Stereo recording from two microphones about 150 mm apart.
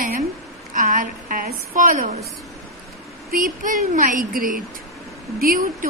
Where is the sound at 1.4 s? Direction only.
65° right (ahead or behind).